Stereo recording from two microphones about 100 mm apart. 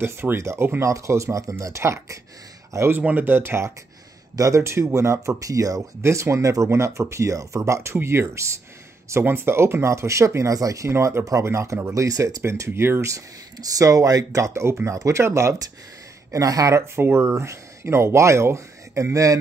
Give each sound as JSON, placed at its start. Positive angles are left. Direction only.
{"t": 0.0, "sound": "speech", "side_deg": -25}
{"t": 3.0, "sound": "speech", "side_deg": -15}